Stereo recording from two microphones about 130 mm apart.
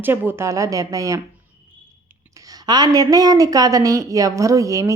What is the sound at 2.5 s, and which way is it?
A woman's voice, 30° right (ahead or behind).